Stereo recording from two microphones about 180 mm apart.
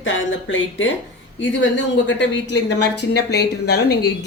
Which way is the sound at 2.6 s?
65° left (ahead or behind).